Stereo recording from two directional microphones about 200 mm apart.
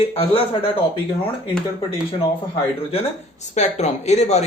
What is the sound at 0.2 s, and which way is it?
Speech, 30° left (ahead or behind).